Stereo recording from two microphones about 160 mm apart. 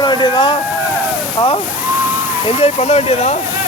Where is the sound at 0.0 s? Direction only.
25° left (ahead or behind); by 3.4 s 45° left (ahead or behind).